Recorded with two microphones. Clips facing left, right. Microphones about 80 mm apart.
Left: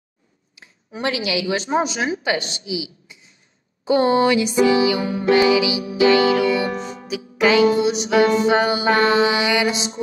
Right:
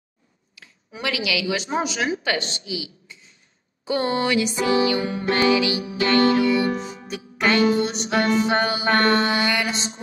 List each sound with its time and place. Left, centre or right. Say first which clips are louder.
0.6 s a woman's voice: left 5 dB; left
5.5 s music: left 2 dB; centre
6.3 s music: left 1 dB; left
6.7 s music: even; left
7.1 s music: left 4 dB; centre